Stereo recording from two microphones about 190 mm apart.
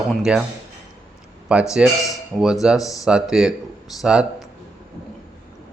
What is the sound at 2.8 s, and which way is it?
Speech, 20° left (ahead or behind).